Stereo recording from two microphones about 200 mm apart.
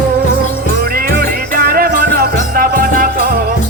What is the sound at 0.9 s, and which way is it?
Music, 50° right (ahead or behind).